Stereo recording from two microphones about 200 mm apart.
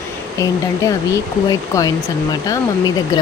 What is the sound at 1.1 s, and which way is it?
Speech, 15° left (ahead or behind).